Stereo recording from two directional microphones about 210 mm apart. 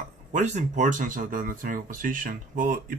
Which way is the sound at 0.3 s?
35° right (ahead or behind).